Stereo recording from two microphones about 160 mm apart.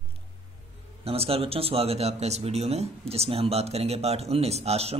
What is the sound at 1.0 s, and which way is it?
Speech, 40° right (ahead or behind).